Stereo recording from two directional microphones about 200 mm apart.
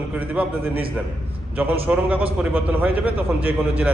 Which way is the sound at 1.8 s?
5° right (ahead or behind).